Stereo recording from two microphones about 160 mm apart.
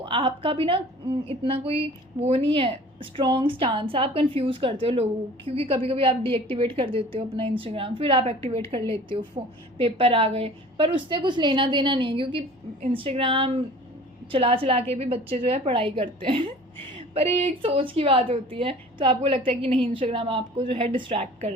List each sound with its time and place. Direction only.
0.0 s a woman's voice: 35° right (ahead or behind)